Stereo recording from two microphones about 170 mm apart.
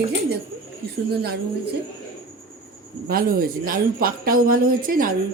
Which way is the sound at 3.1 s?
60° right (ahead or behind).